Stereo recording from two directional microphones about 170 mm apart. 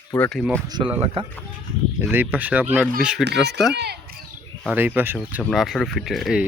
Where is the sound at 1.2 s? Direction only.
35° right (ahead or behind).